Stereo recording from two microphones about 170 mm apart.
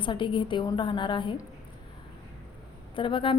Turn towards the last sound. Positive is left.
turn(degrees=30)  # may be behind; listen again after turning